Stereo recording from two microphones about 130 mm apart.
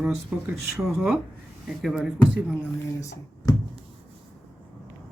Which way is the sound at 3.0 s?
25° left (ahead or behind).